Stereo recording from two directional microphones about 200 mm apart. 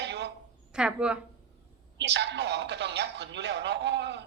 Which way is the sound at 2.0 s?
60° right (ahead or behind).